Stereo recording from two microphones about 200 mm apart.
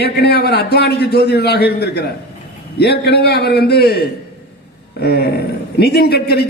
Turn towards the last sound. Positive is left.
turn(degrees=55)  # may be behind; listen again after turning